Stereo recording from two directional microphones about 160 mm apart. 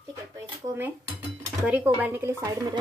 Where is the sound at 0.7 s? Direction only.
10° right (ahead or behind).